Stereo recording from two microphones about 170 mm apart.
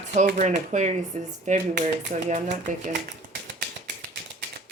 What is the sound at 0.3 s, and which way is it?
Speech, 45° right (ahead or behind).